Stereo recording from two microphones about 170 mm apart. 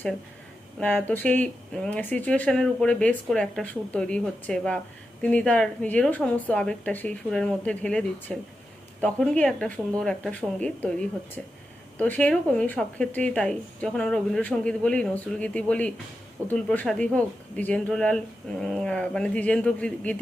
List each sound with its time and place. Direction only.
0.8 s a woman's voice: 10° left (ahead or behind)